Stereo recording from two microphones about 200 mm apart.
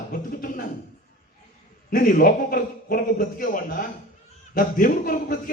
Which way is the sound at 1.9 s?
45° left (ahead or behind).